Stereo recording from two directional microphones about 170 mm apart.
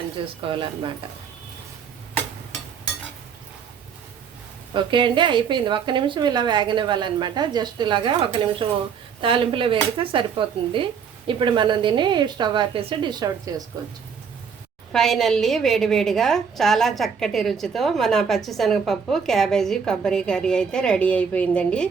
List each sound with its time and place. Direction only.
0.2 s speech: 30° right (ahead or behind)
4.7 s a woman's voice: 30° right (ahead or behind)
14.9 s a woman's voice: centre (ahead or behind)